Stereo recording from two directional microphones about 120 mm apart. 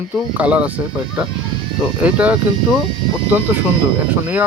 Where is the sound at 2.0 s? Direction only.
10° right (ahead or behind).